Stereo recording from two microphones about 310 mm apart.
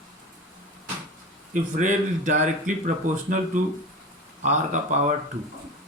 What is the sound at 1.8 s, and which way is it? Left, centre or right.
Speech, right.